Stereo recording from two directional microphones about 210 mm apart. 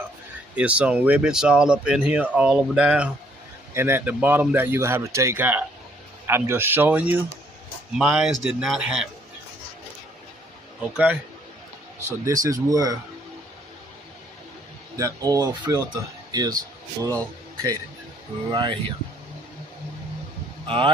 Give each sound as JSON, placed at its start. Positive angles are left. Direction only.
{"t": 0.5, "sound": "speech", "side_deg": -5}
{"t": 10.9, "sound": "speech", "side_deg": -5}
{"t": 12.2, "sound": "speech", "side_deg": -15}
{"t": 14.9, "sound": "a man's voice", "side_deg": -15}
{"t": 20.7, "sound": "speech", "side_deg": -25}